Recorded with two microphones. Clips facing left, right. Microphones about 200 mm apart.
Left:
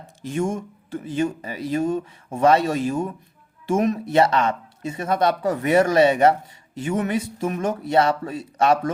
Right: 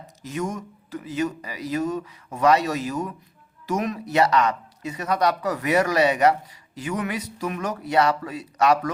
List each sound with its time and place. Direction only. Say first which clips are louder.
0.2 s speech: left 4 dB; 30° left (ahead or behind)